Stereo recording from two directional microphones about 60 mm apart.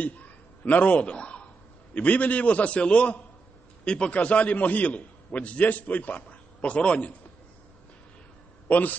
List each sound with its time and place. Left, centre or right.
0.0 s a sound: left
2.0 s a man's voice: left
8.6 s a man's voice: left